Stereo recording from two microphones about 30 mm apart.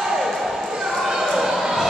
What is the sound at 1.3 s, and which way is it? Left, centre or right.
Basketball bounce, centre.